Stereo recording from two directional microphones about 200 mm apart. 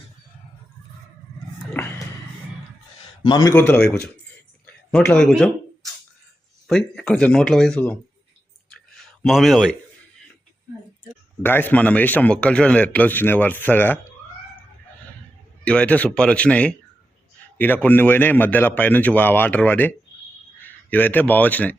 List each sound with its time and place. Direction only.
1.8 s cat: 10° left (ahead or behind)
3.2 s a man's voice: 20° left (ahead or behind)
3.5 s a man's voice: 10° left (ahead or behind)
4.6 s a sound: 5° left (ahead or behind)
6.7 s speech: 5° left (ahead or behind)
8.7 s a sound: centre (ahead or behind)
11.4 s a man's voice: 10° left (ahead or behind)
15.6 s speech: 5° left (ahead or behind)
17.8 s a man's voice: 10° left (ahead or behind)